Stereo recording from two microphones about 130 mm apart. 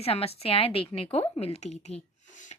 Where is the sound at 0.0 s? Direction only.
50° left (ahead or behind).